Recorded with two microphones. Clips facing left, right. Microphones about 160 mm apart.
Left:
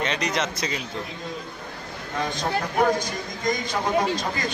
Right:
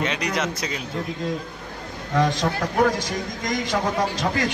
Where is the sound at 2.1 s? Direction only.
90° right.